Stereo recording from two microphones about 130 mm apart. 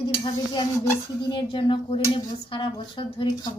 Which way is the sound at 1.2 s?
40° left (ahead or behind).